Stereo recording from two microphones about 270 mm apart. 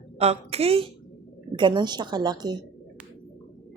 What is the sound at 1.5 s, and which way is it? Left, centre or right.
Speech, centre.